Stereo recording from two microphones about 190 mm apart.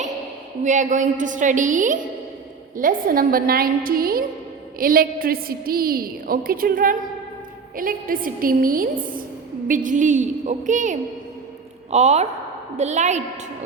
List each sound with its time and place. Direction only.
0.6 s a woman's voice: 40° right (ahead or behind)